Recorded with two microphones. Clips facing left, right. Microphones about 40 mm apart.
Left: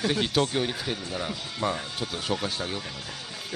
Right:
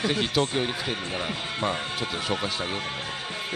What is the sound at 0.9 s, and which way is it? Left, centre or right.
Speech, right.